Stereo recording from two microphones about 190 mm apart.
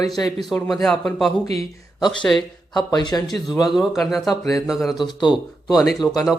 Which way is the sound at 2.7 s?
20° left (ahead or behind).